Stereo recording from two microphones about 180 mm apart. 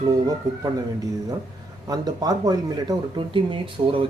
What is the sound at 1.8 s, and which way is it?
A man's voice, 20° right (ahead or behind).